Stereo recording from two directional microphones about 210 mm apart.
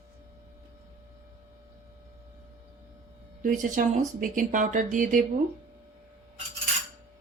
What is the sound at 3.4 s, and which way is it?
Speech, 40° right (ahead or behind).